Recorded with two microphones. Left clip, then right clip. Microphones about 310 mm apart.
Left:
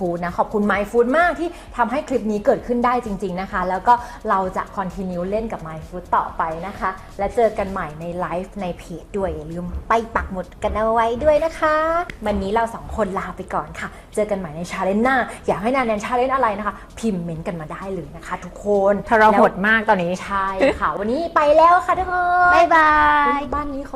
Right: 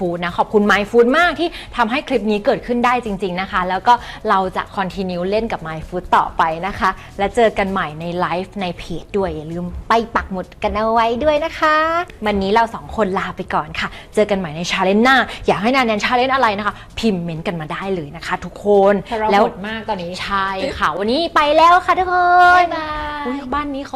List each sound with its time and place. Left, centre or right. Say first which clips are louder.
0.1 s a woman's voice: right 4 dB; right
9.9 s a woman's voice: right 3 dB; right
19.6 s speech: left 7 dB; centre
20.1 s a woman's voice: right 1 dB; right
22.7 s speech: left 10 dB; centre